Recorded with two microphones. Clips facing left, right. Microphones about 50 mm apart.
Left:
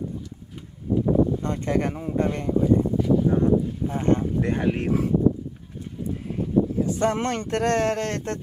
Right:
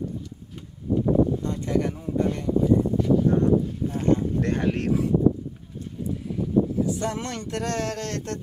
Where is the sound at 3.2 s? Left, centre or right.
Centre.